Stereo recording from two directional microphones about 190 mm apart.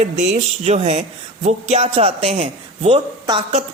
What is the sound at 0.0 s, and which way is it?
A man's voice, 35° right (ahead or behind).